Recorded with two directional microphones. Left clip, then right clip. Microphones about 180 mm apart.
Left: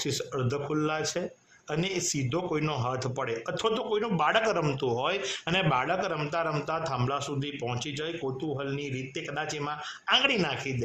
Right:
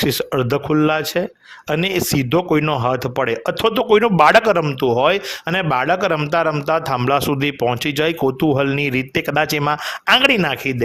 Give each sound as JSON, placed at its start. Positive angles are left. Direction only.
{"t": 0.0, "sound": "a man's voice", "side_deg": -40}